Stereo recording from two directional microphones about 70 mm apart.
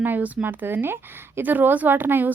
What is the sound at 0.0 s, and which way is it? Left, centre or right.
Speech, right.